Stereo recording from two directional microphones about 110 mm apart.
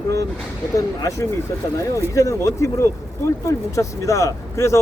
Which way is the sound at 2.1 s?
30° left (ahead or behind).